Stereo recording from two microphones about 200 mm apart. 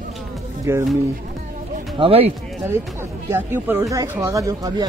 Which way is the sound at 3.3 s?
10° right (ahead or behind).